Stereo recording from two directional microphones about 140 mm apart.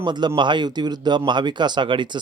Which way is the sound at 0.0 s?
30° right (ahead or behind).